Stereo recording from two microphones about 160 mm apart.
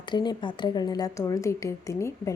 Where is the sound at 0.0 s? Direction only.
25° left (ahead or behind).